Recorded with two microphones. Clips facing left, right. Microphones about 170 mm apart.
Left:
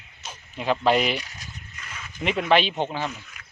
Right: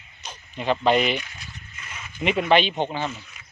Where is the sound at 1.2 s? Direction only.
40° left (ahead or behind).